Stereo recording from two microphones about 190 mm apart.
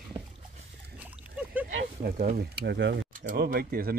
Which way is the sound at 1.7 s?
55° right (ahead or behind).